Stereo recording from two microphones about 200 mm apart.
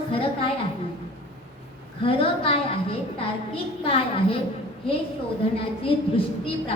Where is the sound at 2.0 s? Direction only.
25° left (ahead or behind).